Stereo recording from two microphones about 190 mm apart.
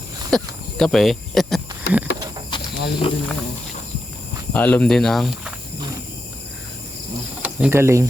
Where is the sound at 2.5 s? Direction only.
25° left (ahead or behind).